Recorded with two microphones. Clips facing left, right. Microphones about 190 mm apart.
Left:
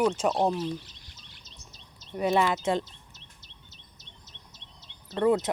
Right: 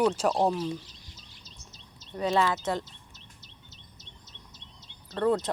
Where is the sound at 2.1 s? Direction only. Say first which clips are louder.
Left 1 dB; 15° left (ahead or behind).